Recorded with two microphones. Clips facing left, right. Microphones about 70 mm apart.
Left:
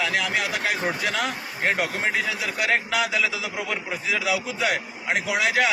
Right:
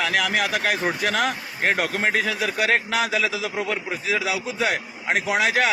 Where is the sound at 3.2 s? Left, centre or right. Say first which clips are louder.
Right 1 dB; right.